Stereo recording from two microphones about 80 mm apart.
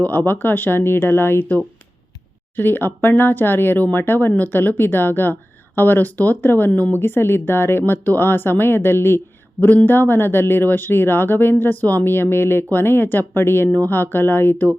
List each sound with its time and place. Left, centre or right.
0.0 s speech: left